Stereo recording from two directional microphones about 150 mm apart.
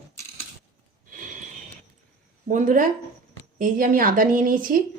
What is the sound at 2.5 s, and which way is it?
Speech, 60° right (ahead or behind).